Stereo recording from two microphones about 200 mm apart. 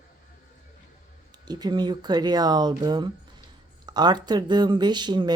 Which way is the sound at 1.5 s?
20° right (ahead or behind).